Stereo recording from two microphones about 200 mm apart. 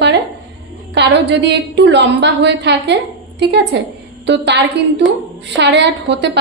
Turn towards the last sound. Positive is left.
turn(degrees=-60)  # may be behind; listen again after turning